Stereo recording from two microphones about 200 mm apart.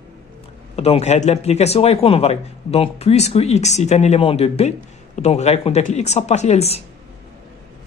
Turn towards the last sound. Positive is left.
turn(degrees=30)  # may be behind; listen again after turning